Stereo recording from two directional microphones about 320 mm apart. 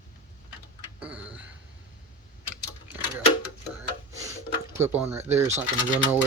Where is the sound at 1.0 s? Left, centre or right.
Centre.